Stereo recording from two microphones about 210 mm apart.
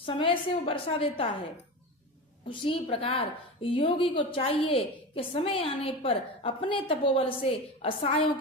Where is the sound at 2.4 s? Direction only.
25° left (ahead or behind).